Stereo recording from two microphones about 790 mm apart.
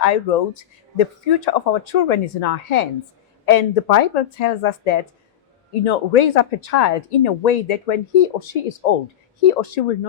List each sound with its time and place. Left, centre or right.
0.0 s speech: left